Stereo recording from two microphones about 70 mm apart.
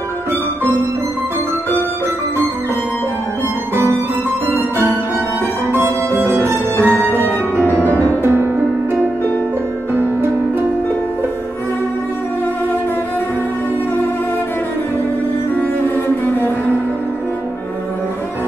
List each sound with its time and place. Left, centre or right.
3.7 s music: right
5.7 s music: right
7.2 s music: left
8.2 s music: right
16.3 s cello: left